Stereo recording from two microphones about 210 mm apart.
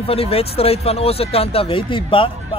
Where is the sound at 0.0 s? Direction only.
30° left (ahead or behind).